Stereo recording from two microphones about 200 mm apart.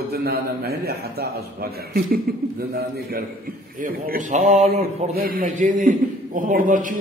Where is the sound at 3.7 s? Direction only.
45° right (ahead or behind).